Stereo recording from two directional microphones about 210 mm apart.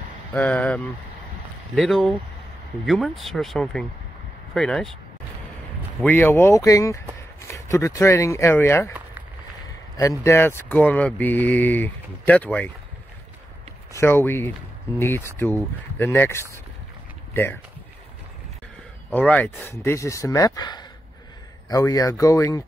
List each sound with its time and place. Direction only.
0.3 s speech: 5° left (ahead or behind)
5.9 s speech: 10° left (ahead or behind)
9.9 s speech: 15° left (ahead or behind)
13.9 s speech: 10° left (ahead or behind)
19.0 s speech: 5° left (ahead or behind)